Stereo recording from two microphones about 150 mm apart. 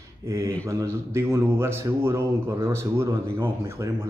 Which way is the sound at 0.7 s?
20° right (ahead or behind).